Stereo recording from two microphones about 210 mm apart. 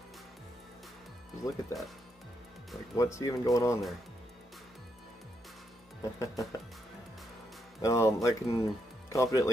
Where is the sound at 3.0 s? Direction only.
15° left (ahead or behind).